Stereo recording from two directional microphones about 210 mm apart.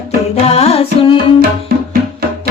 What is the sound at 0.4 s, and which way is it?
Music, 30° left (ahead or behind).